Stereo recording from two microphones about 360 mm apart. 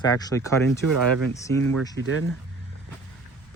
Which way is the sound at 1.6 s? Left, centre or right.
Right.